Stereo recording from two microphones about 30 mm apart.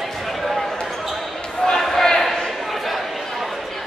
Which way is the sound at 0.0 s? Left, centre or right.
Centre.